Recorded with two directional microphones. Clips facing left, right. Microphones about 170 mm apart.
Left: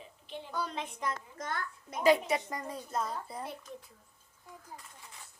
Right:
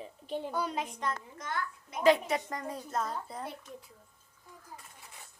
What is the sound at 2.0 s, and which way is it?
A woman's voice, 5° left (ahead or behind).